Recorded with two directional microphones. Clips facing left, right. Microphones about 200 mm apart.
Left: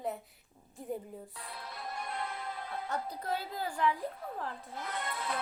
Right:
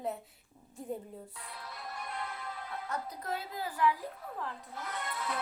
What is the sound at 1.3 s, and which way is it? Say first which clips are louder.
Music: left 2 dB; 30° left (ahead or behind).